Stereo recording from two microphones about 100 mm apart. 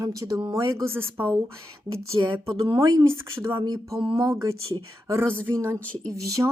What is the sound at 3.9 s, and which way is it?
Speech, 65° right (ahead or behind).